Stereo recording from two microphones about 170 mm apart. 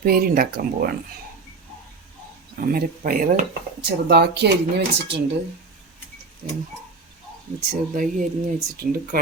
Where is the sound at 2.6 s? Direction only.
60° right (ahead or behind).